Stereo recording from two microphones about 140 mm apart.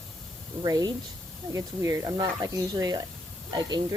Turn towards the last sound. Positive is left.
turn(degrees=-30)  # may be behind; listen again after turning